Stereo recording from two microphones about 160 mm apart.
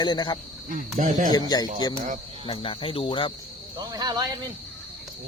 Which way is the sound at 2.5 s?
35° left (ahead or behind).